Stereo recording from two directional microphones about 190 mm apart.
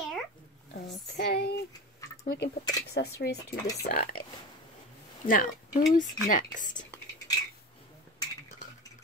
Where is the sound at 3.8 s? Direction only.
50° left (ahead or behind).